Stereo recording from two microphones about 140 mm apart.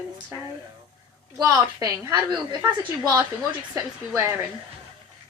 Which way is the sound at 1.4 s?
25° right (ahead or behind).